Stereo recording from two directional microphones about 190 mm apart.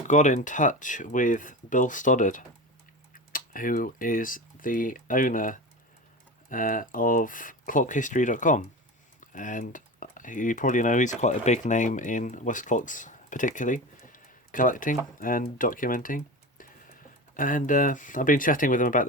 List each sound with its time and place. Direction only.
0.1 s speech: 40° left (ahead or behind)